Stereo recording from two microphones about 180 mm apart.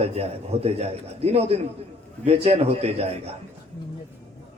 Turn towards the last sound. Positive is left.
turn(degrees=-35)  # may be behind; listen again after turning